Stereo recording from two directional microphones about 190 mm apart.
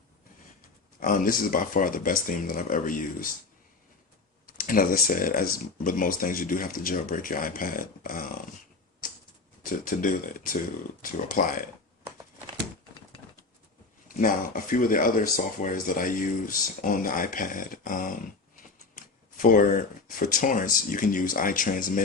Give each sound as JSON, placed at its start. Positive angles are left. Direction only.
{"t": 0.9, "sound": "speech", "side_deg": 45}
{"t": 4.4, "sound": "speech", "side_deg": 45}
{"t": 9.6, "sound": "speech", "side_deg": 45}
{"t": 14.1, "sound": "speech", "side_deg": 45}